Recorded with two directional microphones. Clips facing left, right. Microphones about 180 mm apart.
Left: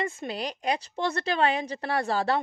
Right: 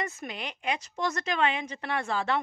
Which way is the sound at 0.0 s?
30° left (ahead or behind).